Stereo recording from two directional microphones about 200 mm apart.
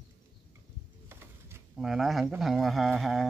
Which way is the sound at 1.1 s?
10° right (ahead or behind).